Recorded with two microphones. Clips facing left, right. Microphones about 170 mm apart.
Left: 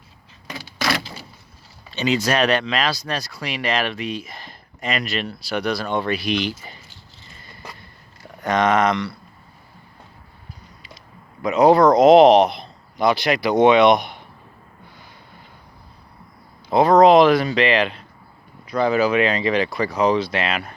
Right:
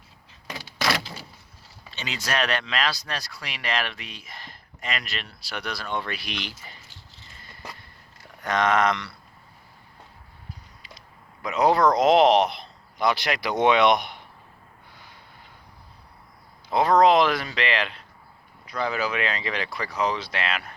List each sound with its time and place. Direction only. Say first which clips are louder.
0.8 s a sound: left 2 dB; 5° right (ahead or behind)
2.0 s speech: left 9 dB; 15° left (ahead or behind)
8.4 s speech: left 4 dB; 5° left (ahead or behind)
11.4 s speech: left 7 dB; 20° left (ahead or behind)
12.0 s speech: left 8 dB; 10° left (ahead or behind)
12.3 s speech: left 6 dB; 45° left (ahead or behind)
13.6 s speech: left 6 dB; 30° left (ahead or behind)
16.7 s speech: left 6 dB; 20° left (ahead or behind)
18.7 s speech: left 9 dB; 30° left (ahead or behind)
19.2 s speech: left 10 dB; 15° left (ahead or behind)